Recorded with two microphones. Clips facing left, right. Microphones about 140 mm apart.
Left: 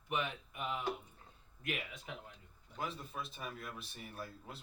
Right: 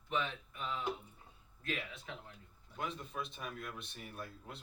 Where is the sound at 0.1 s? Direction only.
15° left (ahead or behind).